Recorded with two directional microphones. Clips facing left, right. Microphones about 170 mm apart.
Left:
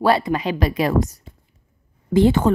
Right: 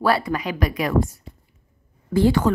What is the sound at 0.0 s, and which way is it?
Speech, 25° left (ahead or behind).